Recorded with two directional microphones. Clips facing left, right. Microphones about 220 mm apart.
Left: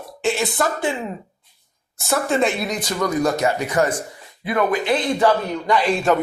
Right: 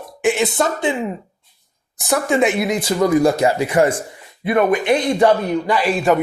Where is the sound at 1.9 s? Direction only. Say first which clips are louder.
Right 3 dB; 15° right (ahead or behind).